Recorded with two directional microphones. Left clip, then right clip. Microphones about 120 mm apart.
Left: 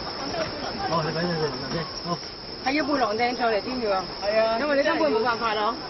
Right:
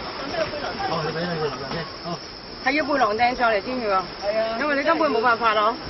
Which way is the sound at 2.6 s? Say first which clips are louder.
Right 3 dB; 30° right (ahead or behind).